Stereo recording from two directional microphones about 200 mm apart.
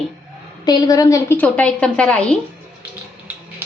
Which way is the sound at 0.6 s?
20° left (ahead or behind).